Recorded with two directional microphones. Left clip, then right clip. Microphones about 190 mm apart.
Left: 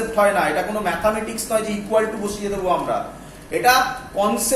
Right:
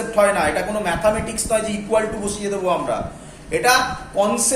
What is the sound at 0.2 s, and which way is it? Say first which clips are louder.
Speech: right 1 dB; 25° right (ahead or behind).